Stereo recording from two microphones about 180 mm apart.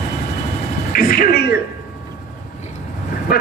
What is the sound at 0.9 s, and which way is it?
Speech, 55° left (ahead or behind).